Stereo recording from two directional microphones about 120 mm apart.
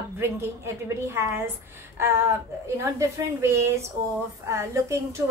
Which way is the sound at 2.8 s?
20° right (ahead or behind).